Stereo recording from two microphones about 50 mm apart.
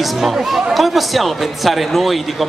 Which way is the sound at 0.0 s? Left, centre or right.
Centre.